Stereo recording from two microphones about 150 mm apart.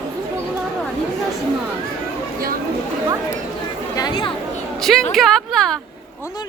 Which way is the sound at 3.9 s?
30° left (ahead or behind).